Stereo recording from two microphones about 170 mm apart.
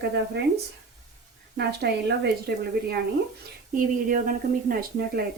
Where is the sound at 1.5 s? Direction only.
75° right (ahead or behind).